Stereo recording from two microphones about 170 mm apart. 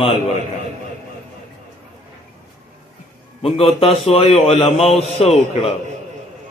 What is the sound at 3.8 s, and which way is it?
Speech, 35° left (ahead or behind).